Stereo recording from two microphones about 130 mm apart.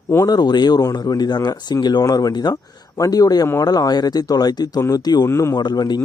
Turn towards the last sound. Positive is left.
turn(degrees=30)  # may be behind; listen again after turning